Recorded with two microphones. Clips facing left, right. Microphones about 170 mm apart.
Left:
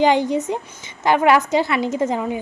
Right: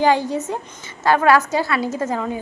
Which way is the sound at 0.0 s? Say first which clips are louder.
Left 1 dB; 20° left (ahead or behind).